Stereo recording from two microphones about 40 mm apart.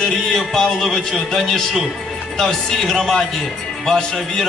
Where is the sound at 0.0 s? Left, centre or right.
Centre.